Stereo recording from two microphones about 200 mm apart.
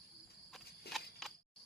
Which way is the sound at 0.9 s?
Centre (ahead or behind).